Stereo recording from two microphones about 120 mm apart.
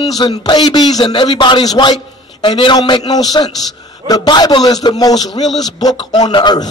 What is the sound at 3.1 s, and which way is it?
A man's voice, 30° left (ahead or behind).